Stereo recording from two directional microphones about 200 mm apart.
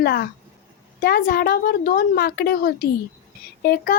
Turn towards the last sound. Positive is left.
turn(degrees=50)  # may be behind; listen again after turning